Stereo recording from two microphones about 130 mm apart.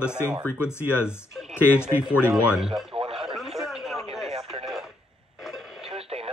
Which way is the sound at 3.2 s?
5° right (ahead or behind).